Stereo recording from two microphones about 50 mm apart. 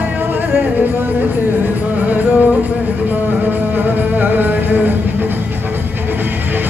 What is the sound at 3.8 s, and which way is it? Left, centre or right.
Music, right.